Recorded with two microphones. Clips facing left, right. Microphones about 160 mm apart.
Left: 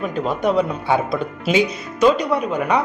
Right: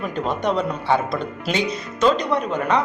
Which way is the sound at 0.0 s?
5° left (ahead or behind).